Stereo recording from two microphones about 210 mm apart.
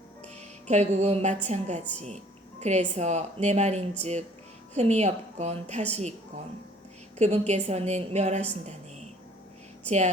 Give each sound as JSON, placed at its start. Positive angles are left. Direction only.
{"t": 0.3, "sound": "music", "side_deg": -30}
{"t": 1.5, "sound": "speech", "side_deg": -30}
{"t": 7.2, "sound": "speech", "side_deg": -30}
{"t": 8.4, "sound": "a sound", "side_deg": -30}